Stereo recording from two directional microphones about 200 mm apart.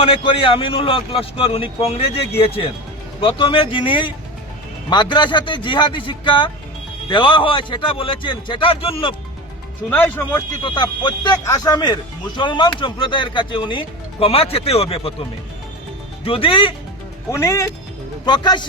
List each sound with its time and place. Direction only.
0.0 s speech: 25° left (ahead or behind)
9.9 s speech: 10° left (ahead or behind)
10.6 s speech: 25° left (ahead or behind)
16.2 s speech: 30° left (ahead or behind)
17.3 s speech: 15° left (ahead or behind)